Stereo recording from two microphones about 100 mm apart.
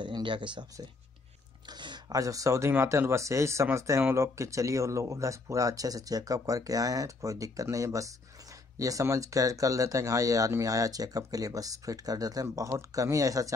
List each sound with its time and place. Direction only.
0.0 s speech: 55° right (ahead or behind)
1.7 s a sound: 45° right (ahead or behind)
2.1 s speech: 35° right (ahead or behind)